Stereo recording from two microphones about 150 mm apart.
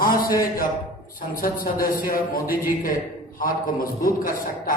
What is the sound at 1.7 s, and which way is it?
A man's voice, 75° left (ahead or behind).